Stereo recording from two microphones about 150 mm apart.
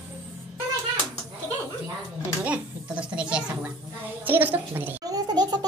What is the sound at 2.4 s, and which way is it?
A woman's voice, 10° right (ahead or behind).